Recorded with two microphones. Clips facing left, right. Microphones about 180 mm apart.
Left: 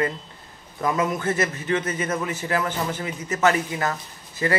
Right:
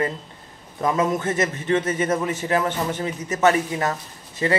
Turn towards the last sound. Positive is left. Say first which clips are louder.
# right 2 dB
turn(degrees=-25)  # may be behind; listen again after turning